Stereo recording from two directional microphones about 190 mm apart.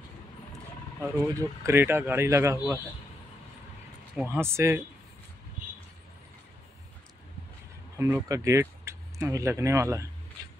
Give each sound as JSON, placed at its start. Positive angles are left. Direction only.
{"t": 1.1, "sound": "speech", "side_deg": -10}
{"t": 4.1, "sound": "speech", "side_deg": -10}
{"t": 5.6, "sound": "vehicle", "side_deg": -45}
{"t": 8.0, "sound": "speech", "side_deg": -15}